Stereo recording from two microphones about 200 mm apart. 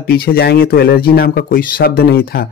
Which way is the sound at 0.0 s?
50° left (ahead or behind).